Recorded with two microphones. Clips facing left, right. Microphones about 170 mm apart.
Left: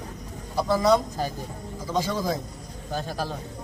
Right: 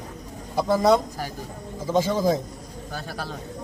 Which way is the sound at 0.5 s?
20° right (ahead or behind).